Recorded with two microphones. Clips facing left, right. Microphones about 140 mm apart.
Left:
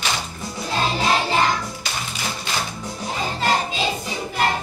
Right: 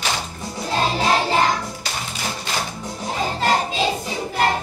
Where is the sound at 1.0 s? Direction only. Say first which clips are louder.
Right 1 dB; 40° right (ahead or behind).